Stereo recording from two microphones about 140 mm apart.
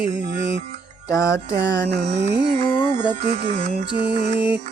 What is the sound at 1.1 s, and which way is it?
Music, 20° left (ahead or behind).